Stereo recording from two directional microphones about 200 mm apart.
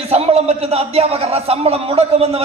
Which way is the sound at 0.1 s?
30° right (ahead or behind).